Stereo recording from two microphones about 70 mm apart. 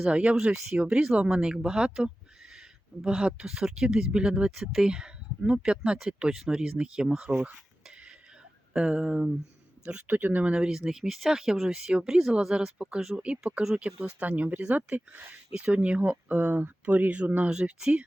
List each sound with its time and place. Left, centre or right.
0.0 s speech: centre
8.7 s speech: centre
9.8 s speech: right
10.5 s speech: centre